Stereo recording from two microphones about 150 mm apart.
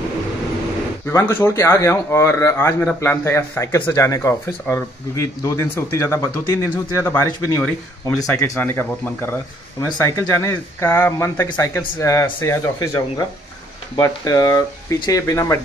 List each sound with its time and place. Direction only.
1.1 s speech: 20° left (ahead or behind)